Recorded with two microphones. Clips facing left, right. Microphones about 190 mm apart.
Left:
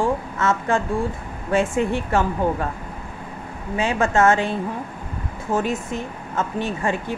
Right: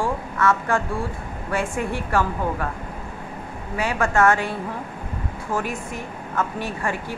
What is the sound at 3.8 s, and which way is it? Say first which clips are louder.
Speech: left 2 dB; 25° left (ahead or behind).